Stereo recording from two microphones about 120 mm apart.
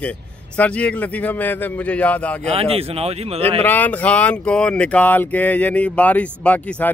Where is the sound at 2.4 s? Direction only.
55° right (ahead or behind).